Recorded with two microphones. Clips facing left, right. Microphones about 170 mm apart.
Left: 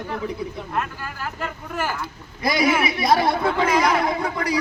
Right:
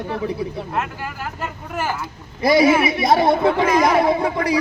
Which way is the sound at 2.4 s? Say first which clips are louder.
Right 6 dB; 25° right (ahead or behind).